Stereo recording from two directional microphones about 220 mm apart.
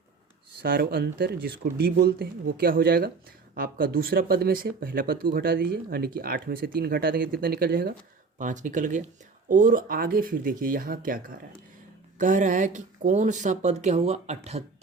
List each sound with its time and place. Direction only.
0.6 s speech: 45° right (ahead or behind)
12.2 s speech: 35° right (ahead or behind)